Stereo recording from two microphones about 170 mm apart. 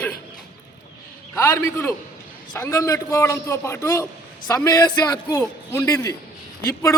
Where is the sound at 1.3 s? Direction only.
15° left (ahead or behind).